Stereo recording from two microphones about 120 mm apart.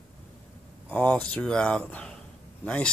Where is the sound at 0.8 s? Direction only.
15° left (ahead or behind).